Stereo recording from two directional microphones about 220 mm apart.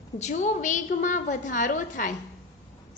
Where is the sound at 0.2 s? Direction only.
30° left (ahead or behind).